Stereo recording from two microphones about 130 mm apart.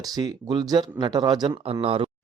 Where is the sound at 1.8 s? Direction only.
45° right (ahead or behind).